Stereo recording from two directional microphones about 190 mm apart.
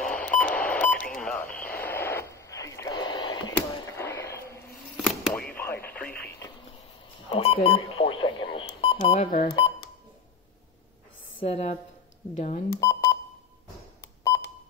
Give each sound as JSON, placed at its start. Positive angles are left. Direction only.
{"t": 0.0, "sound": "beep", "side_deg": 5}
{"t": 1.1, "sound": "radio", "side_deg": 5}
{"t": 3.9, "sound": "a sound", "side_deg": 10}
{"t": 4.9, "sound": "a sound", "side_deg": 0}
{"t": 5.5, "sound": "radio", "side_deg": 10}
{"t": 7.2, "sound": "alarm clock", "side_deg": 30}
{"t": 9.0, "sound": "speech", "side_deg": 35}
{"t": 11.4, "sound": "speech", "side_deg": 35}
{"t": 12.8, "sound": "beep", "side_deg": 15}
{"t": 14.3, "sound": "a sound", "side_deg": 15}